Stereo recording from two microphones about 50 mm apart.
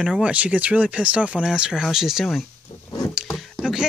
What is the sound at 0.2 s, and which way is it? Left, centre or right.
Speech, right.